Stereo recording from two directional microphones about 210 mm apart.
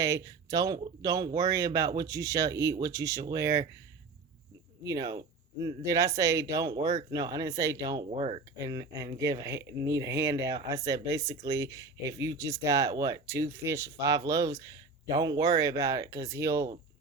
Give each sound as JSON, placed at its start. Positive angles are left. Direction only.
{"t": 0.0, "sound": "speech", "side_deg": -15}
{"t": 4.8, "sound": "speech", "side_deg": -15}